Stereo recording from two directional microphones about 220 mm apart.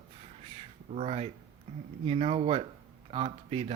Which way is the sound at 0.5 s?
30° right (ahead or behind).